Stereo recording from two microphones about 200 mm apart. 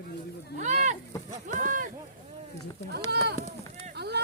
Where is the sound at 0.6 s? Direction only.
35° right (ahead or behind).